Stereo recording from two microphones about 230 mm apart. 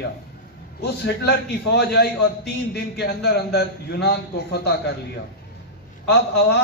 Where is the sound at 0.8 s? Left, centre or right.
Left.